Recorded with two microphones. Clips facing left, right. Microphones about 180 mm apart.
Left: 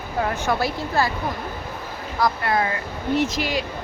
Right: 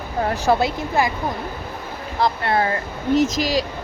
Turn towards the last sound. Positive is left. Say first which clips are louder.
# right 4 dB
turn(degrees=-40)  # may be behind; listen again after turning